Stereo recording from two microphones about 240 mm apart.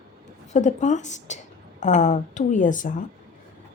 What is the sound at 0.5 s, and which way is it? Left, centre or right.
A woman's voice, left.